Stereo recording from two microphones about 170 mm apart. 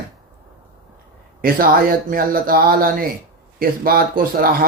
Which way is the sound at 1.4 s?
55° right (ahead or behind).